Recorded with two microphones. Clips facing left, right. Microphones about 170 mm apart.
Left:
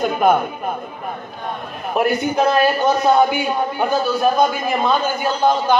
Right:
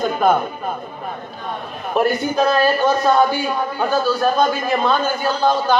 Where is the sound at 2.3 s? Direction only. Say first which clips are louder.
Even; 20° left (ahead or behind).